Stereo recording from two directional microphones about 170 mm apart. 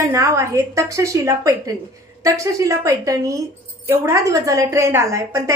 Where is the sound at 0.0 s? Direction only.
15° right (ahead or behind).